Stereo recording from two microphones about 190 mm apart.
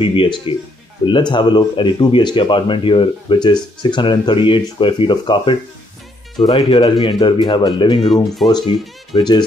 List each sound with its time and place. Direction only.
0.0 s speech: 25° left (ahead or behind)